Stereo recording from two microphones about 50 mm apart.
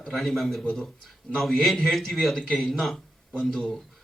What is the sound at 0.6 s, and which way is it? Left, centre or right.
Speech, centre.